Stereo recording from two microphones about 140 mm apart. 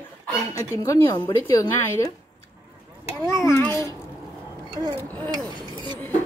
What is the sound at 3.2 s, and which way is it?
Speech, 20° left (ahead or behind).